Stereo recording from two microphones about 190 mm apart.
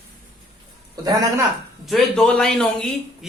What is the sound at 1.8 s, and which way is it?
A man's voice, centre (ahead or behind).